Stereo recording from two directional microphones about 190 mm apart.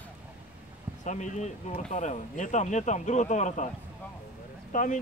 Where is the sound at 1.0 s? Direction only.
40° left (ahead or behind).